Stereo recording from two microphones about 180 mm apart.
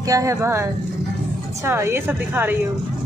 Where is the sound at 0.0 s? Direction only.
20° right (ahead or behind).